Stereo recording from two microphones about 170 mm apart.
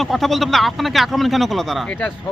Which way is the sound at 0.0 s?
Centre (ahead or behind).